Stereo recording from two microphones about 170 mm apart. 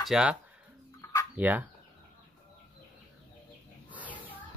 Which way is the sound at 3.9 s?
10° right (ahead or behind).